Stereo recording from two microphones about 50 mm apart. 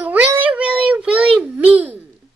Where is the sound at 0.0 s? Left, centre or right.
Right.